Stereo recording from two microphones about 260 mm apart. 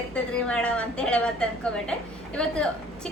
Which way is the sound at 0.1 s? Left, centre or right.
Centre.